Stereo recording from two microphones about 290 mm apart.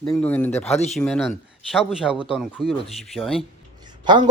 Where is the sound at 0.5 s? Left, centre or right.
Left.